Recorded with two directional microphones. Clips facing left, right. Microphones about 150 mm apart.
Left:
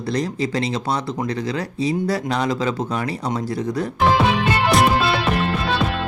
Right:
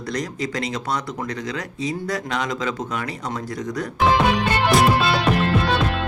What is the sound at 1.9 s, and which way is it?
Speech, 35° left (ahead or behind).